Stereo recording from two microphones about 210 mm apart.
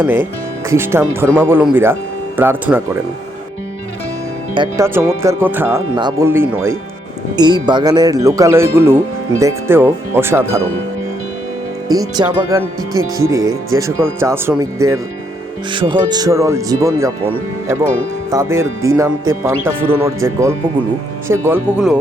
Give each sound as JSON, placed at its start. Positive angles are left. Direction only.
{"t": 0.0, "sound": "speech", "side_deg": -10}
{"t": 4.5, "sound": "speech", "side_deg": -20}
{"t": 12.1, "sound": "speech", "side_deg": -20}
{"t": 13.4, "sound": "speech", "side_deg": -70}
{"t": 13.7, "sound": "speech", "side_deg": -15}
{"t": 18.3, "sound": "speech", "side_deg": -15}